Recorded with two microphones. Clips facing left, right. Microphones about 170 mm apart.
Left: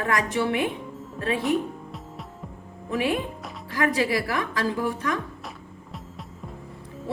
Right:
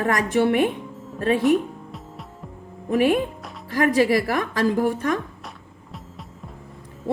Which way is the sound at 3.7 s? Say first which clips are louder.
Right 5 dB; 45° right (ahead or behind).